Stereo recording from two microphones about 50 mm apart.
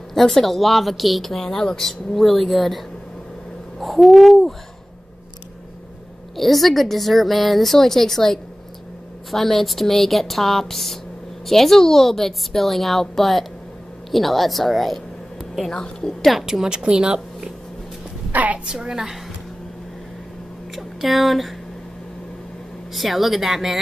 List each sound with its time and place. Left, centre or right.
0.1 s speech: centre
3.8 s speech: centre
6.3 s speech: centre
15.7 s a woman's voice: centre
16.3 s speech: centre
16.6 s a woman's voice: centre
18.3 s a woman's voice: right
18.7 s a woman's voice: centre
20.7 s speech: centre
22.9 s speech: centre